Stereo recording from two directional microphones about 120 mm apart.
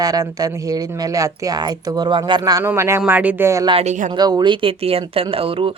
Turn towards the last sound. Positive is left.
turn(degrees=-50)  # may be behind; listen again after turning